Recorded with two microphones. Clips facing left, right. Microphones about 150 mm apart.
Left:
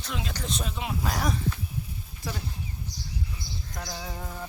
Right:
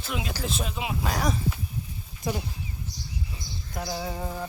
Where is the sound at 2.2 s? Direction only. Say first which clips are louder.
Right 6 dB; 15° right (ahead or behind).